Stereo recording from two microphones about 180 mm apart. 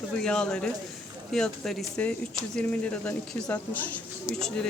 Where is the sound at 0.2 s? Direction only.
5° left (ahead or behind).